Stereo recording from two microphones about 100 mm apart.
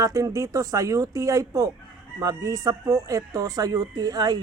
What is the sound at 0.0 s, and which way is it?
Speech, 35° right (ahead or behind).